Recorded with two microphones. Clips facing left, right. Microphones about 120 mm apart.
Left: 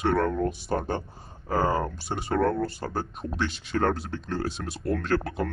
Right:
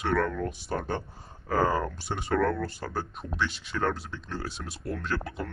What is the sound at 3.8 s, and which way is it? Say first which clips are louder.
Speech: left 4 dB; 55° left (ahead or behind).